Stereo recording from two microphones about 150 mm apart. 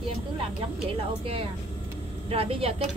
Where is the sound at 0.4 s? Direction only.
40° right (ahead or behind).